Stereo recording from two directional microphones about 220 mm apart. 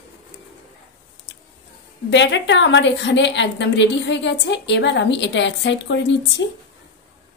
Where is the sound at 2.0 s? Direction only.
55° left (ahead or behind).